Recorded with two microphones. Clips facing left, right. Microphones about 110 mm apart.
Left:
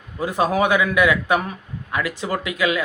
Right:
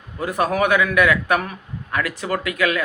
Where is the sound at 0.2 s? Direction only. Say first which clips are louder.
Left 1 dB; 20° left (ahead or behind).